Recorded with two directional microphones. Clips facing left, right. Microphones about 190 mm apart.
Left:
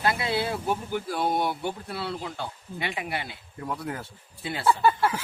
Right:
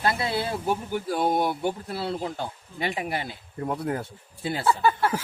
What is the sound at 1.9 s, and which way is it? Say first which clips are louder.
Speech: right 3 dB; 40° right (ahead or behind).